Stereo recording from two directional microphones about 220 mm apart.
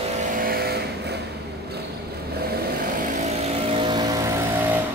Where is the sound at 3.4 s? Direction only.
25° right (ahead or behind).